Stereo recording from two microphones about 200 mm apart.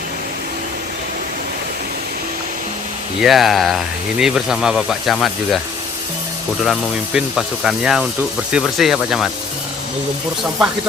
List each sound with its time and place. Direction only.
3.2 s speech: centre (ahead or behind)
6.6 s speech: centre (ahead or behind)